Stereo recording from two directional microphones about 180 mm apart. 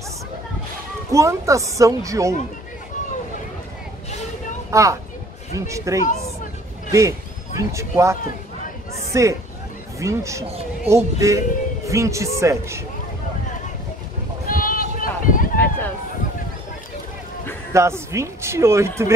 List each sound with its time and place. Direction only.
1.1 s speech: 15° right (ahead or behind)
4.6 s a man's voice: 15° right (ahead or behind)
14.5 s a sound: 50° left (ahead or behind)
15.5 s run: 10° left (ahead or behind)
17.7 s speech: 15° right (ahead or behind)